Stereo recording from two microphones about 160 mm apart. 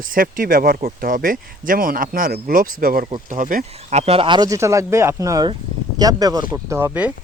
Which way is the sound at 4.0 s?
35° right (ahead or behind).